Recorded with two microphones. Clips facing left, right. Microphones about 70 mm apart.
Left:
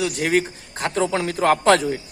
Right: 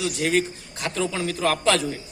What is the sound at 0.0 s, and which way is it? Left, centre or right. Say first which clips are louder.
A man's voice: left 2 dB; left.